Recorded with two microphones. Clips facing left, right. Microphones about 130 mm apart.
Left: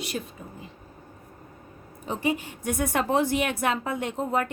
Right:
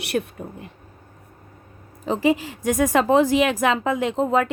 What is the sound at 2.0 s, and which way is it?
A woman's voice, 90° right.